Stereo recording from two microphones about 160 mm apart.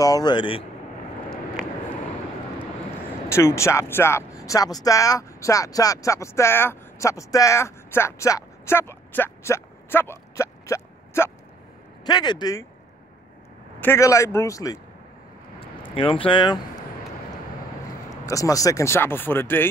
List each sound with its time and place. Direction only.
0.0 s speech: 25° left (ahead or behind)
1.6 s vehicle: 5° right (ahead or behind)
3.3 s speech: 15° left (ahead or behind)
13.7 s speech: 15° left (ahead or behind)
15.6 s a sound: 35° left (ahead or behind)
18.1 s speech: 20° left (ahead or behind)